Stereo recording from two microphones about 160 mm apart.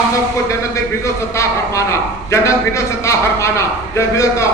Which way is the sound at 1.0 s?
20° left (ahead or behind).